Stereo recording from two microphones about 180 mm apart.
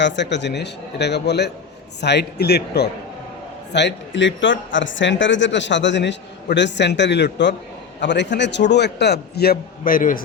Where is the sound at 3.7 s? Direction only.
80° left.